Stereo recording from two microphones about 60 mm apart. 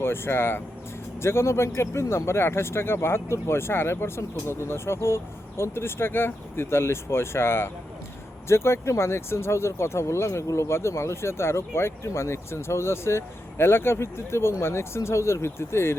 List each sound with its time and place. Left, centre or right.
0.0 s speech: left